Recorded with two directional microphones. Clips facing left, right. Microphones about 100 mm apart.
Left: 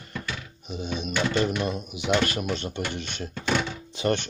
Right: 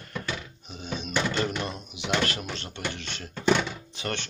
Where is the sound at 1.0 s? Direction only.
10° left (ahead or behind).